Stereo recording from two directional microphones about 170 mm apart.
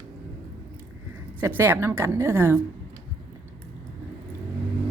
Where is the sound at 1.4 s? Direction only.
10° right (ahead or behind).